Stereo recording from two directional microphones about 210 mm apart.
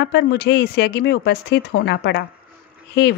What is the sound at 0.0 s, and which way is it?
A woman's voice, 55° left (ahead or behind).